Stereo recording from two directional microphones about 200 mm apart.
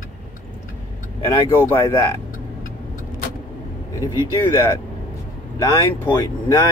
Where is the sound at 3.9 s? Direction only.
15° left (ahead or behind).